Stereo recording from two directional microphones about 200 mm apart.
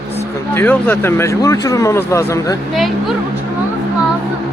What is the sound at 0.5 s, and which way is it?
Speech, 10° left (ahead or behind).